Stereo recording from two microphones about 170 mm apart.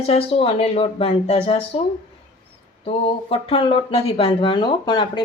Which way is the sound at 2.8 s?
35° left (ahead or behind).